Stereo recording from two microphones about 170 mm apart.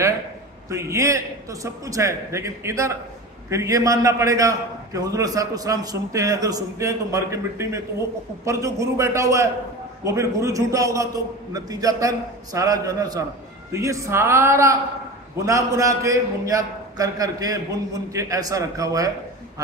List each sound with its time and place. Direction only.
0.7 s a man's voice: 15° right (ahead or behind)